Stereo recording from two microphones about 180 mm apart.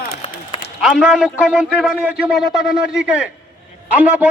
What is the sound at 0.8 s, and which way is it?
A man's voice, centre (ahead or behind).